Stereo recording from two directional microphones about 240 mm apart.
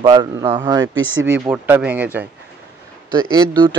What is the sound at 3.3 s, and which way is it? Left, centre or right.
Speech, centre.